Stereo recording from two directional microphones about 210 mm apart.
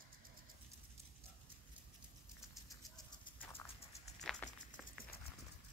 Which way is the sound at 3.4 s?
10° left (ahead or behind).